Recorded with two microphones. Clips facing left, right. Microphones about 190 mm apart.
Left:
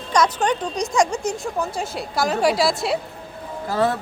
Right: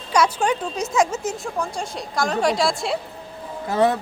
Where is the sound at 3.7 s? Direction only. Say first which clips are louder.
Right 2 dB; 20° right (ahead or behind).